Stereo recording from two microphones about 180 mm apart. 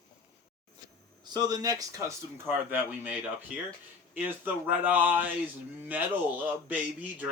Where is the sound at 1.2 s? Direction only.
20° right (ahead or behind).